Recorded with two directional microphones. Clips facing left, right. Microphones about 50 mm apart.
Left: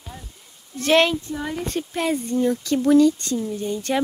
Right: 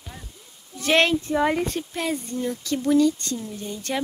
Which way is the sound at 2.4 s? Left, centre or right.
Left.